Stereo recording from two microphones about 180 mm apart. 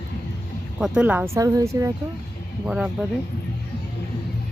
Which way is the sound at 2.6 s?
5° right (ahead or behind).